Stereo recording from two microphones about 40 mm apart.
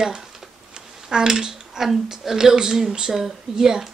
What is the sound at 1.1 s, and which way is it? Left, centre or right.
Speech, centre.